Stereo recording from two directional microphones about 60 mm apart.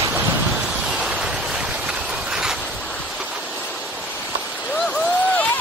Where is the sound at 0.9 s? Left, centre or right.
Centre.